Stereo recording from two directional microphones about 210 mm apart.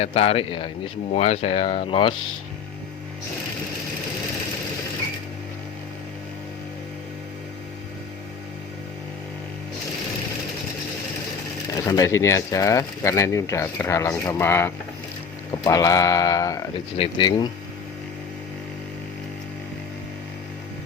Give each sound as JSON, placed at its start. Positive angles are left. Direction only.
{"t": 0.0, "sound": "speech", "side_deg": 30}
{"t": 11.9, "sound": "speech", "side_deg": 15}